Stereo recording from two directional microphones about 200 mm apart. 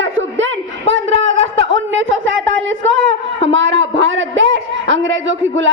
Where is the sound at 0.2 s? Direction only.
70° right (ahead or behind).